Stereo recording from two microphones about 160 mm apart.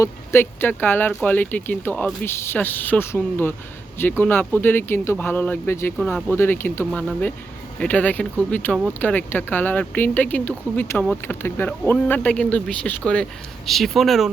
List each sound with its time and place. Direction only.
0.0 s speech: 15° left (ahead or behind); by 14.3 s centre (ahead or behind)